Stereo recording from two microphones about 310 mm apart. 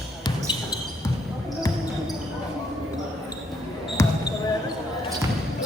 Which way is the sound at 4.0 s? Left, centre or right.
Centre.